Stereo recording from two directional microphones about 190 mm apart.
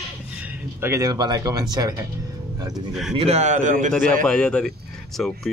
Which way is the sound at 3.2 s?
35° right (ahead or behind).